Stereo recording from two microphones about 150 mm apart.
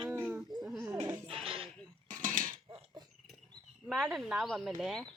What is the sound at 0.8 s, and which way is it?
Goat, 20° right (ahead or behind).